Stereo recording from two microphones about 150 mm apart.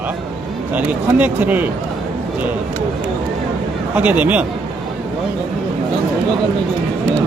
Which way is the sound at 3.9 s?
10° right (ahead or behind).